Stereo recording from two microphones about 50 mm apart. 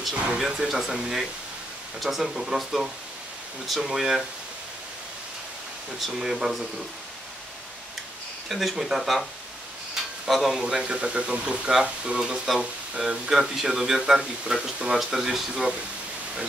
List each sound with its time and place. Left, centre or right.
0.4 s speech: centre
5.9 s speech: centre
8.5 s speech: centre
10.6 s speech: centre
12.5 s speech: centre